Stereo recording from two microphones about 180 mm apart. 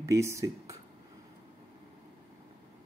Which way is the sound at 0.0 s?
15° right (ahead or behind).